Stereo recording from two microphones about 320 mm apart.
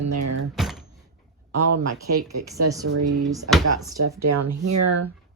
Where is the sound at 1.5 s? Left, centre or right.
Right.